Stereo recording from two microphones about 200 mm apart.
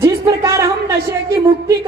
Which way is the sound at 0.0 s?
15° right (ahead or behind).